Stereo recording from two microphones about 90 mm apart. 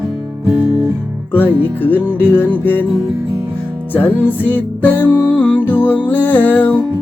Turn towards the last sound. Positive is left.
turn(degrees=20)  # may be behind; listen again after turning